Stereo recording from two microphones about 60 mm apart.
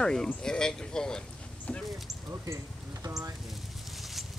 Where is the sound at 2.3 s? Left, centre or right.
Right.